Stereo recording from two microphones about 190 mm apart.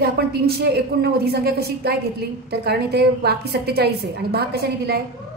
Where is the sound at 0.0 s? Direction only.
55° right (ahead or behind).